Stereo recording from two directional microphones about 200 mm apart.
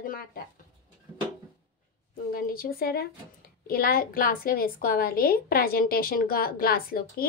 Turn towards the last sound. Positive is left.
turn(degrees=50)  # may be behind; listen again after turning